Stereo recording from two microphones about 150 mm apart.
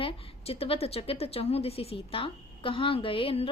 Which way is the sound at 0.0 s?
40° left (ahead or behind).